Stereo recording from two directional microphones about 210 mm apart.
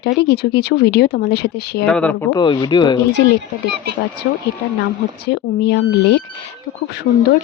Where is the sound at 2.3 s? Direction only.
20° left (ahead or behind).